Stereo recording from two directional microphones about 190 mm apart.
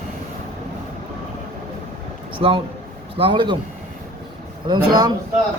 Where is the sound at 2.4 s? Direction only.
30° right (ahead or behind).